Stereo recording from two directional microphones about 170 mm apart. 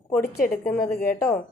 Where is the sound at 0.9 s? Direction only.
60° left (ahead or behind).